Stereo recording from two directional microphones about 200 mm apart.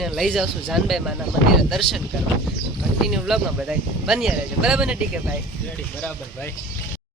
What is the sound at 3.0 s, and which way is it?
Speech, centre (ahead or behind).